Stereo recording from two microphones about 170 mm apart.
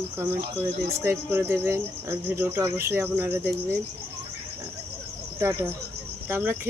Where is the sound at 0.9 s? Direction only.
15° right (ahead or behind).